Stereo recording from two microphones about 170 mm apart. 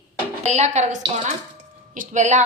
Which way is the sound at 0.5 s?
40° right (ahead or behind).